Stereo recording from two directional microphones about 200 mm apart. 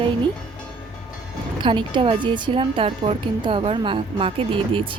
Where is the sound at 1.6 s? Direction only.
25° right (ahead or behind).